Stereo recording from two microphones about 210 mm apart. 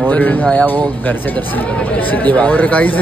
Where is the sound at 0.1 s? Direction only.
10° left (ahead or behind).